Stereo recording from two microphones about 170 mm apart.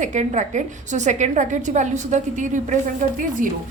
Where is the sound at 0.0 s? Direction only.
45° right (ahead or behind).